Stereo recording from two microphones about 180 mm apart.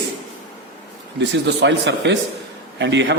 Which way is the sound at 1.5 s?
75° right (ahead or behind).